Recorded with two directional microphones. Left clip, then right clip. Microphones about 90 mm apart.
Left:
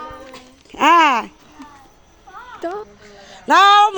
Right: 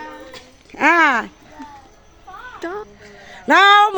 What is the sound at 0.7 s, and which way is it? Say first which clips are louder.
Speech: left 2 dB; 40° left (ahead or behind).